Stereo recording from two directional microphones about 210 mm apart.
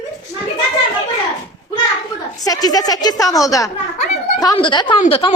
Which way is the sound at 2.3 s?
15° left (ahead or behind).